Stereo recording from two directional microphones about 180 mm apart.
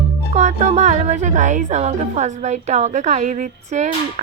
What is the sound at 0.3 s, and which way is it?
A woman's voice, 40° right (ahead or behind).